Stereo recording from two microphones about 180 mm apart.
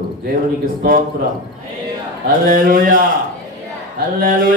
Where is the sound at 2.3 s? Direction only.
50° right (ahead or behind).